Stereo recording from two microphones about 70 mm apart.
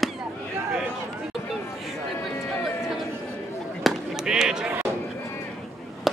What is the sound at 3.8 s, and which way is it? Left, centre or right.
Chop, centre.